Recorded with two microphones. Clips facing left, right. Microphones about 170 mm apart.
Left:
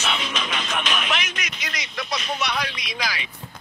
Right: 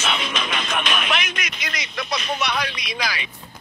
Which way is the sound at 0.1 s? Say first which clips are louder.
Right 2 dB; 60° right (ahead or behind).